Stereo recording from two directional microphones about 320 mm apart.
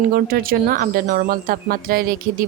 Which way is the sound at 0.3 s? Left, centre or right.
Right.